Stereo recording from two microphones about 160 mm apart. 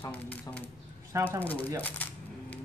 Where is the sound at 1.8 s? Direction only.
10° left (ahead or behind).